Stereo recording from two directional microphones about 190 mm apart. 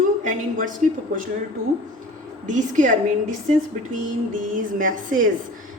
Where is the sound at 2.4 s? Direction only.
40° right (ahead or behind).